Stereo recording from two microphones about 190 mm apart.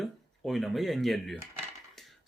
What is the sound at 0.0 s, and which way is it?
Speech, centre (ahead or behind).